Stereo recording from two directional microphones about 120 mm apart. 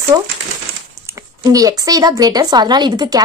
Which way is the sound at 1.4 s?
30° right (ahead or behind).